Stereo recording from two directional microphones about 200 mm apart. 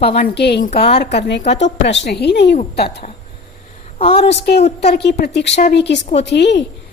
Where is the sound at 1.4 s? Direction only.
35° left (ahead or behind).